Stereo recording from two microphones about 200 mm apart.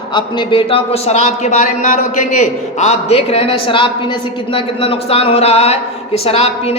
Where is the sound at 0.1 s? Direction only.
25° left (ahead or behind).